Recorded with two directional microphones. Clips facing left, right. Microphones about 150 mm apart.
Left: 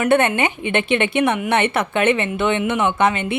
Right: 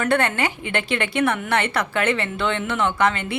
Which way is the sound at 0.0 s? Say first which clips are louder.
Left 4 dB; 20° left (ahead or behind).